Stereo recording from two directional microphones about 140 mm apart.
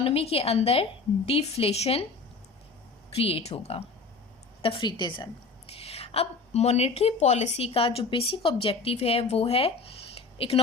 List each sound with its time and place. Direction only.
0.0 s a woman's voice: 45° left (ahead or behind)
3.2 s a woman's voice: 45° left (ahead or behind)